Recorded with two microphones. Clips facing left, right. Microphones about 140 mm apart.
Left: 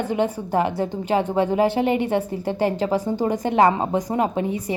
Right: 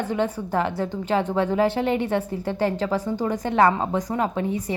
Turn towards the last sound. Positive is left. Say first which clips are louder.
# left 2 dB
turn(degrees=10)  # may be behind; listen again after turning